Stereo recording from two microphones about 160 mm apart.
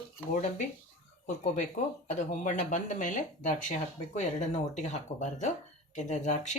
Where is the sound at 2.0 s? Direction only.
50° left (ahead or behind).